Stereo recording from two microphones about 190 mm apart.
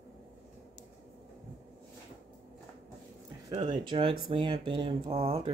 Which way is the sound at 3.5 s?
40° right (ahead or behind).